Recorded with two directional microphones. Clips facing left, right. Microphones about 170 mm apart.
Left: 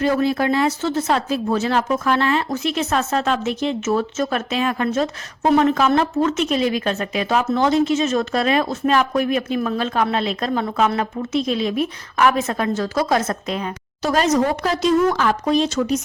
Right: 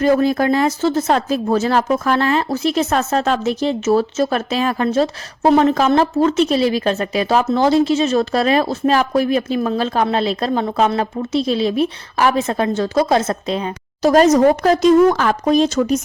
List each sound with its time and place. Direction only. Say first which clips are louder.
0.0 s speech: right 4 dB; 45° right (ahead or behind); by 13.7 s 25° right (ahead or behind)
14.0 s speech: right 7 dB; 40° right (ahead or behind)